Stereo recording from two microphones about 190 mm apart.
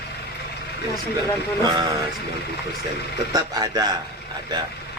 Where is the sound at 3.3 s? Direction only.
20° right (ahead or behind).